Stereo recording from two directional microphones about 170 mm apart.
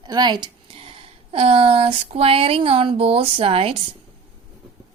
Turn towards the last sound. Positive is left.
turn(degrees=-35)  # may be behind; listen again after turning